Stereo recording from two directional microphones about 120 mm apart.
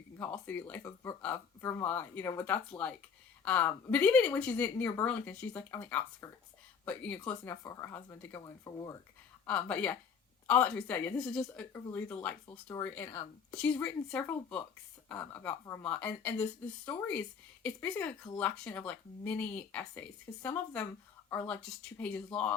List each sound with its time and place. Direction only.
0.2 s speech: 15° left (ahead or behind)
8.4 s speech: 30° left (ahead or behind)
9.5 s speech: 10° left (ahead or behind)
13.1 s a woman's voice: 45° left (ahead or behind)
13.6 s speech: 15° left (ahead or behind)